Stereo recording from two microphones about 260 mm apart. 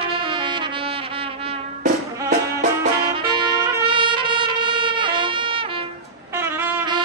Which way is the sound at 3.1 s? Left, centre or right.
Centre.